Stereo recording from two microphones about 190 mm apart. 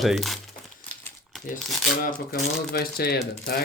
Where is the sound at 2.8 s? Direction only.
55° left (ahead or behind).